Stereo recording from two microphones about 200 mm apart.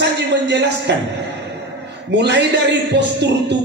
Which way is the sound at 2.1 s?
60° right (ahead or behind).